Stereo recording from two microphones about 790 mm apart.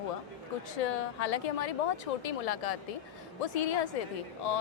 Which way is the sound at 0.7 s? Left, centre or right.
Left.